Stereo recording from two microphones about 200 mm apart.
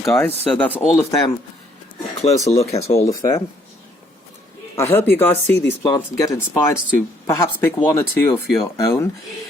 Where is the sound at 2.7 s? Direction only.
30° left (ahead or behind).